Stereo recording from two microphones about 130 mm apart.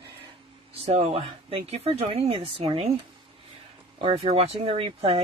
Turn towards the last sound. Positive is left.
turn(degrees=-45)  # may be behind; listen again after turning